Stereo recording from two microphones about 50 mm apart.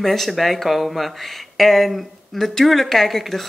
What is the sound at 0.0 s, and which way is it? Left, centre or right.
Speech, centre.